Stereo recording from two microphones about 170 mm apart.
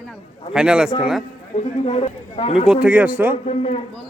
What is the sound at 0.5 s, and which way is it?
Speech, 5° right (ahead or behind).